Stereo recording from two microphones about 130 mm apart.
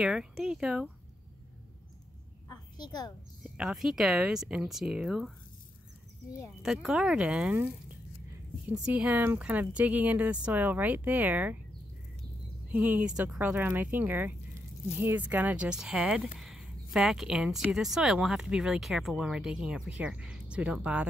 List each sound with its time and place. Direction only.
0.0 s speech: 5° right (ahead or behind)
2.5 s a sound: 30° left (ahead or behind)
3.5 s speech: 5° right (ahead or behind)
6.6 s speech: 5° right (ahead or behind)
8.8 s speech: 10° right (ahead or behind)
12.7 s speech: 10° right (ahead or behind)